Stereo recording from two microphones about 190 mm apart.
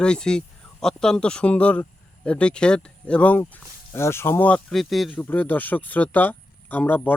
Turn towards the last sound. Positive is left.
turn(degrees=10)  # may be behind; listen again after turning